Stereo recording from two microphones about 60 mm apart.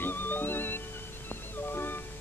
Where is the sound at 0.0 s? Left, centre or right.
Left.